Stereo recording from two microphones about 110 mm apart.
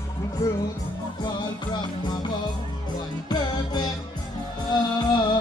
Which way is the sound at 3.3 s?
40° left (ahead or behind).